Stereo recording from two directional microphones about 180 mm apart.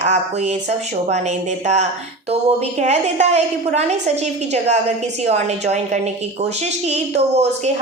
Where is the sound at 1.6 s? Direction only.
40° right (ahead or behind).